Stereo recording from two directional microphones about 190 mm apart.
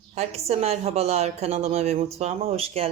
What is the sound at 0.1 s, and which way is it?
A woman's voice, 35° right (ahead or behind).